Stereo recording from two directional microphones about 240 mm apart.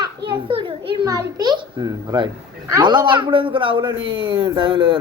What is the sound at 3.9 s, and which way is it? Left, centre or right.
Speech, right.